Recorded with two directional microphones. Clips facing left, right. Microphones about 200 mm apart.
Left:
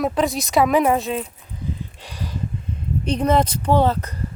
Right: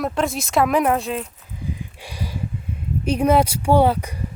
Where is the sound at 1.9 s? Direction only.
10° right (ahead or behind).